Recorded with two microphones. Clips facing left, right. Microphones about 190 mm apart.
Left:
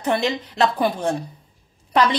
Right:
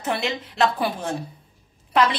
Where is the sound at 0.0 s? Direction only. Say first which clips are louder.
Left 4 dB; centre (ahead or behind).